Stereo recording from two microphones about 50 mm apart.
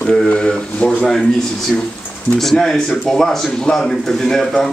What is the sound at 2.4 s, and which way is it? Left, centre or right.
A man's voice, centre.